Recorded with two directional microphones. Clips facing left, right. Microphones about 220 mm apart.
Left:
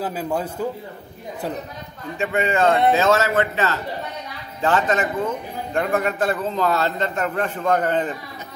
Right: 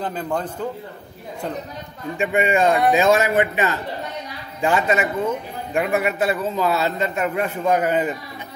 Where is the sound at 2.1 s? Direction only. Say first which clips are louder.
Right 2 dB; 15° right (ahead or behind).